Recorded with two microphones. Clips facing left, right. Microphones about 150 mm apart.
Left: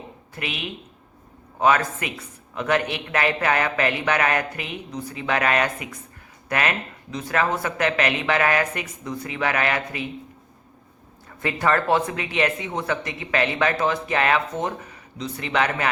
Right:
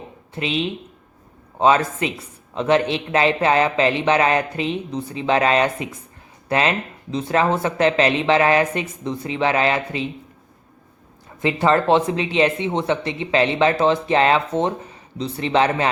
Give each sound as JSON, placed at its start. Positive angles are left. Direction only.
{"t": 0.3, "sound": "speech", "side_deg": -25}
{"t": 11.3, "sound": "speech", "side_deg": -25}